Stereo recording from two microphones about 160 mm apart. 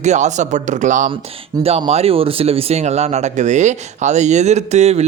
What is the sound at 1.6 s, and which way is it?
Speech, 40° right (ahead or behind).